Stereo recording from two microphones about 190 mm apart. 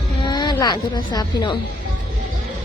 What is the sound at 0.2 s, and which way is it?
Speech, 20° left (ahead or behind).